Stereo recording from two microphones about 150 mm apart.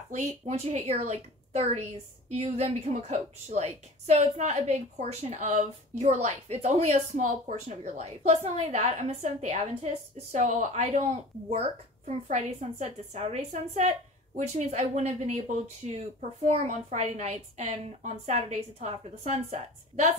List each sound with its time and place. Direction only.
0.1 s a woman's voice: 50° right (ahead or behind)